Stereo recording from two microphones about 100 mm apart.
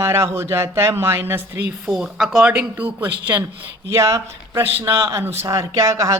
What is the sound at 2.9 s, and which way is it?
A man's voice, 25° right (ahead or behind).